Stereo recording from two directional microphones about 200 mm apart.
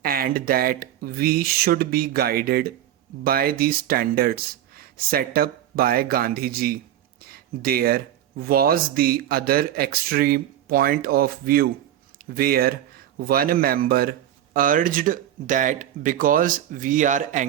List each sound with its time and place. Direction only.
0.0 s speech: 45° right (ahead or behind)